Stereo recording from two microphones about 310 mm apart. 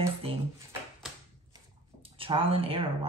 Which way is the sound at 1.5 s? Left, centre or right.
Centre.